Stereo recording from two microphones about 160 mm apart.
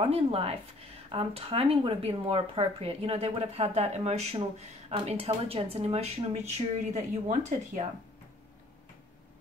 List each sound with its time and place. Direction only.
0.0 s speech: 40° right (ahead or behind)